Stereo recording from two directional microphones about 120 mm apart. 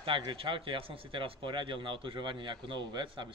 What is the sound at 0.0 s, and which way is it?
Speech, 45° right (ahead or behind).